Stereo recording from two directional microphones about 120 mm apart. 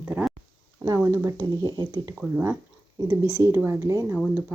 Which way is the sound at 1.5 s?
35° right (ahead or behind).